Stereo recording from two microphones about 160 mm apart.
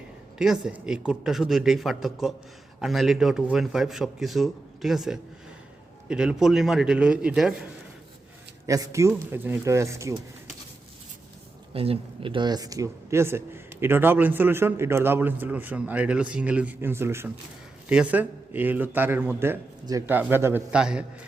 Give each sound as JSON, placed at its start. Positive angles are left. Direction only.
{"t": 0.3, "sound": "a man's voice", "side_deg": -5}
{"t": 8.6, "sound": "speech", "side_deg": -20}
{"t": 11.7, "sound": "speech", "side_deg": -35}
{"t": 20.1, "sound": "speech", "side_deg": -10}